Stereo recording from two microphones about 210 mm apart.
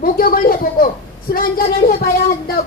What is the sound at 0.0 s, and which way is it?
Speech, 45° left (ahead or behind).